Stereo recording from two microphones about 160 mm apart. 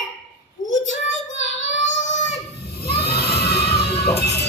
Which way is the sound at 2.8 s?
80° left.